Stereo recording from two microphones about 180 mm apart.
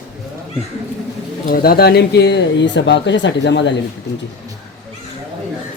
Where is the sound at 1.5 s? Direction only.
55° left (ahead or behind); by 3.7 s 75° left (ahead or behind).